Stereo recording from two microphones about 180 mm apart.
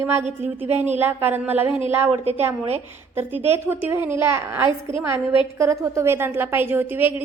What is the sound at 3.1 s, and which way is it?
A woman's voice, 10° right (ahead or behind).